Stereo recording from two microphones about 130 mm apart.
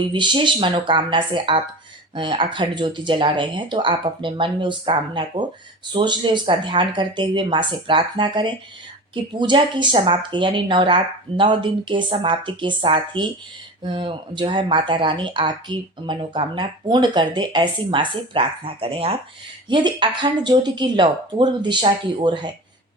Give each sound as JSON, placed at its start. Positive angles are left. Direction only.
{"t": 0.1, "sound": "speech", "side_deg": -35}